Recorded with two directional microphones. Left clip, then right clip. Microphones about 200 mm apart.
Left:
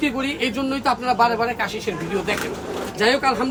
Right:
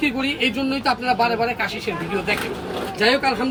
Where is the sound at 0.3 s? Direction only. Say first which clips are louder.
Right 2 dB; 55° left (ahead or behind).